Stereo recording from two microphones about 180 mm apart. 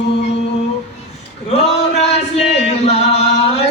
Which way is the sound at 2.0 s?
35° left (ahead or behind).